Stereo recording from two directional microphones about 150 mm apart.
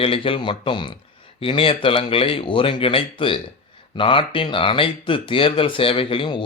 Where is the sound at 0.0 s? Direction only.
35° left (ahead or behind).